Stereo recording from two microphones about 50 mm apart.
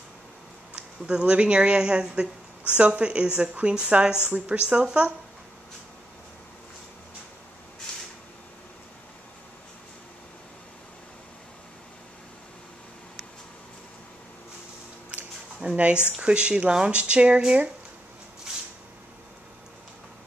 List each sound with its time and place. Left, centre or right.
0.7 s a woman's voice: right
15.1 s a sound: centre
16.2 s a woman's voice: right